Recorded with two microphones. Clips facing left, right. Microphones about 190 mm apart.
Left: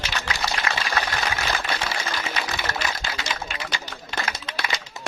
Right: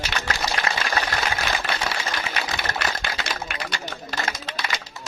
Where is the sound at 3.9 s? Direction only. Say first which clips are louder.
Right 1 dB; 35° right (ahead or behind).